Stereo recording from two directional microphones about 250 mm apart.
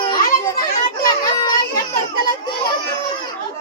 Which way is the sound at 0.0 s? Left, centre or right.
Centre.